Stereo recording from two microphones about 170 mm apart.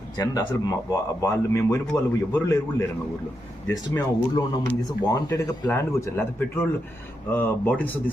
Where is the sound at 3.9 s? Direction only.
15° left (ahead or behind).